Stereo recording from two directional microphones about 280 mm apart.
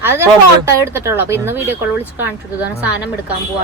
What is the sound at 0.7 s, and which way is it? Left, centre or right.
Speech, centre.